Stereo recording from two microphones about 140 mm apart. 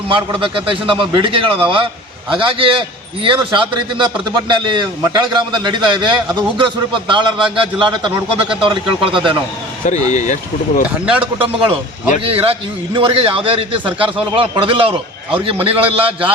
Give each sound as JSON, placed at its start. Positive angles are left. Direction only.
{"t": 0.1, "sound": "a man's voice", "side_deg": -35}
{"t": 10.1, "sound": "speech", "side_deg": 55}
{"t": 10.8, "sound": "speech", "side_deg": -10}
{"t": 11.3, "sound": "a man's voice", "side_deg": -40}